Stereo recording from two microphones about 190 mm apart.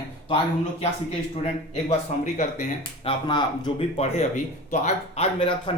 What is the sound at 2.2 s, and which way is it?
Speech, 40° left (ahead or behind).